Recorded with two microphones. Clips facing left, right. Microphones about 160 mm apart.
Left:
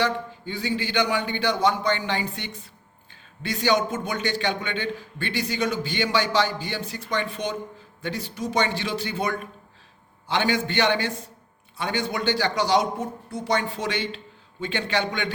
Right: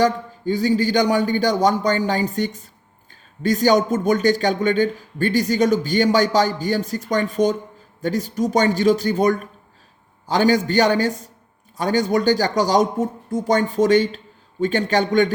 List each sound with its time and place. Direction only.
0.0 s a man's voice: 40° right (ahead or behind)